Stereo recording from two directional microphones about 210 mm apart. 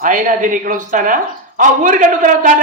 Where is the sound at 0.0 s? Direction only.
40° right (ahead or behind).